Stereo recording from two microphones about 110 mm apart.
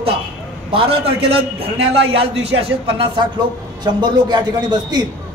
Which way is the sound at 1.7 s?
60° right (ahead or behind).